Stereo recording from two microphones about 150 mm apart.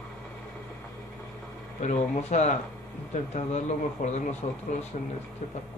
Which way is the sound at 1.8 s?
50° left (ahead or behind).